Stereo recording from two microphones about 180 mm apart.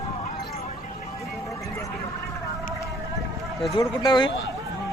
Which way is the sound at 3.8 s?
25° left (ahead or behind).